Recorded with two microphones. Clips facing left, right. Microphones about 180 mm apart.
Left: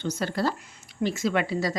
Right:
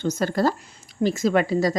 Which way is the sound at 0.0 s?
45° right (ahead or behind).